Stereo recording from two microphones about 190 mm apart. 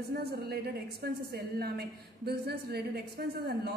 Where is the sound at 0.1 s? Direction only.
60° right (ahead or behind).